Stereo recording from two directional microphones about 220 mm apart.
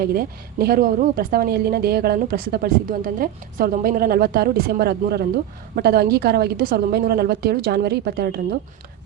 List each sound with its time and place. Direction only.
0.0 s speech: 45° right (ahead or behind)